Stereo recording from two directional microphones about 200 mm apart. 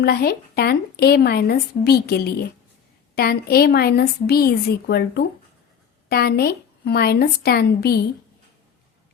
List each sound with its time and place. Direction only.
0.0 s speech: 50° left (ahead or behind)